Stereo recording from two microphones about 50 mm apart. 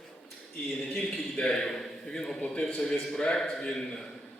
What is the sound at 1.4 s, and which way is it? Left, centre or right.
A man's voice, centre.